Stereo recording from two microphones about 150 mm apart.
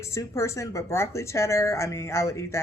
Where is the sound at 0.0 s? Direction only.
20° left (ahead or behind).